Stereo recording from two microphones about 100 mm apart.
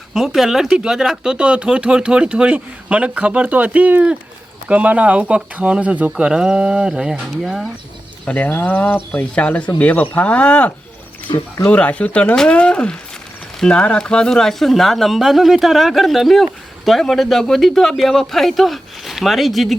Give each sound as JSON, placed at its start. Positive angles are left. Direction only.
{"t": 0.1, "sound": "speech", "side_deg": -5}
{"t": 8.2, "sound": "speech", "side_deg": 15}
{"t": 11.3, "sound": "speech", "side_deg": 45}
{"t": 11.7, "sound": "speech", "side_deg": 15}